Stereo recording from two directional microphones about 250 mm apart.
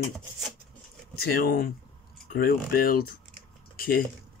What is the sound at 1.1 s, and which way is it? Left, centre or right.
Speech, left.